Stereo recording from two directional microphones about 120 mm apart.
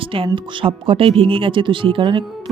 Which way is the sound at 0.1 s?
50° right (ahead or behind).